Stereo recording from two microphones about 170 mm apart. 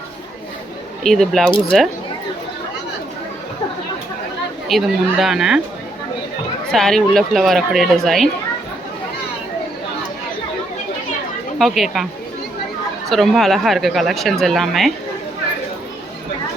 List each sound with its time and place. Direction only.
1.0 s speech: centre (ahead or behind)
1.5 s speech: 30° left (ahead or behind)
4.7 s speech: centre (ahead or behind)
6.7 s speech: centre (ahead or behind)
11.6 s speech: centre (ahead or behind)
13.1 s speech: centre (ahead or behind)